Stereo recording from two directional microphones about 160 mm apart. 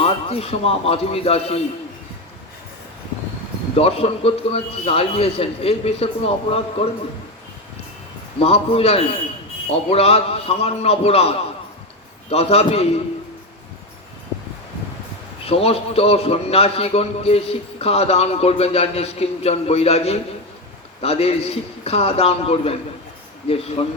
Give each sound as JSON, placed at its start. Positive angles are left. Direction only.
{"t": 0.0, "sound": "a man's voice", "side_deg": 40}
{"t": 3.8, "sound": "a man's voice", "side_deg": 40}
{"t": 8.4, "sound": "a man's voice", "side_deg": 35}
{"t": 15.4, "sound": "a man's voice", "side_deg": 40}